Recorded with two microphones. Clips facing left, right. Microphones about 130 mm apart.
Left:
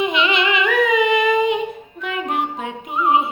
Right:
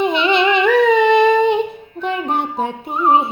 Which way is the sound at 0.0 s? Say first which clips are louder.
Right 4 dB; 35° right (ahead or behind).